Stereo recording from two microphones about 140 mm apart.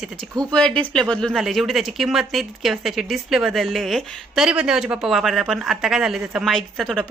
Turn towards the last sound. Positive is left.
turn(degrees=5)  # may be behind; listen again after turning